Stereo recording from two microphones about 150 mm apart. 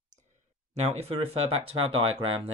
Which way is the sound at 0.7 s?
45° right (ahead or behind).